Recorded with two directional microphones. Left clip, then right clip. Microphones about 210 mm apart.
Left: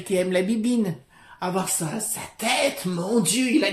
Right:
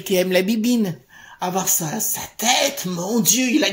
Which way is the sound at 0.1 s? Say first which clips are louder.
Right 4 dB; 40° right (ahead or behind).